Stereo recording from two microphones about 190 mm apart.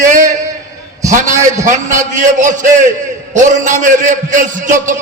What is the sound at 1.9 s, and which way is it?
A man's voice, 40° right (ahead or behind).